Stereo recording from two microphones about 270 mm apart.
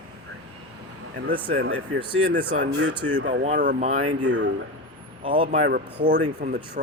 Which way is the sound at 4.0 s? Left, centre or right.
Right.